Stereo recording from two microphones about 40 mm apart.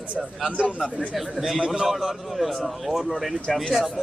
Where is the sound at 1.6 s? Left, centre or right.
Right.